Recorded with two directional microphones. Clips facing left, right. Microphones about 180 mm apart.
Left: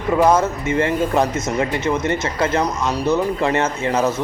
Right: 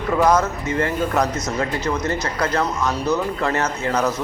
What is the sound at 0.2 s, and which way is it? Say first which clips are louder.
Speech: left 2 dB; 25° left (ahead or behind).